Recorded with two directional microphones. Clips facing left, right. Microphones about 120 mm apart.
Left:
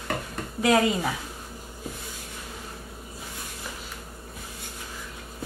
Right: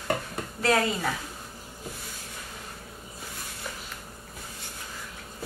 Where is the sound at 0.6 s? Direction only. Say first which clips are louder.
Left 3 dB; 15° left (ahead or behind).